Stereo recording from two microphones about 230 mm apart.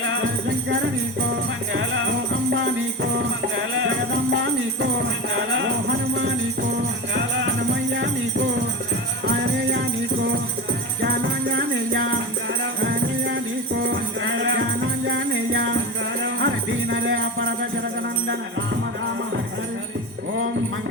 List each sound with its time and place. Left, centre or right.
0.0 s music: right
11.0 s music: right